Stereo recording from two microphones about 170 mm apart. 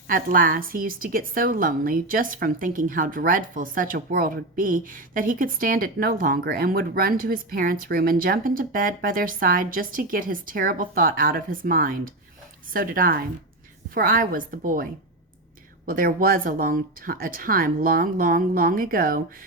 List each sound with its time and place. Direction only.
0.1 s a woman's voice: 55° right (ahead or behind)
15.9 s a woman's voice: 60° right (ahead or behind)